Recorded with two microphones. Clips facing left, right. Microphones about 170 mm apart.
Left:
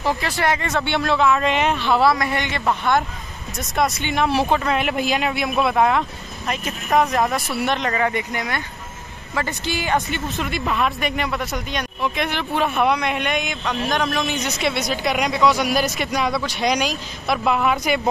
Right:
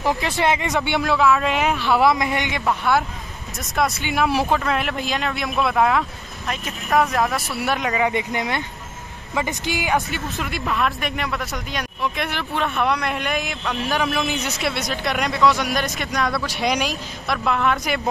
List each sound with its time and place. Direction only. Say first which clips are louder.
0.0 s speech: right 1 dB; 20° right (ahead or behind)
2.0 s speech: even; 20° right (ahead or behind)
9.9 s speech: left 1 dB; centre (ahead or behind)